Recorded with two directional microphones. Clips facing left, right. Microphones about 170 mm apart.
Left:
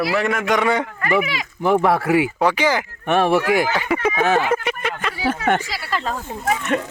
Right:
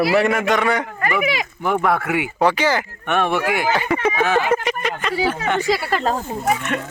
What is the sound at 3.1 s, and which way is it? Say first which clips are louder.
Speech: left 3 dB; 35° left (ahead or behind).